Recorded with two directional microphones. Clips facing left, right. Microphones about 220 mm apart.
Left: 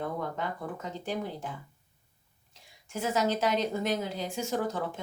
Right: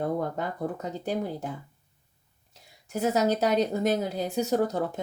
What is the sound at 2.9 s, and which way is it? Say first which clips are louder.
Speech: right 4 dB; 40° right (ahead or behind).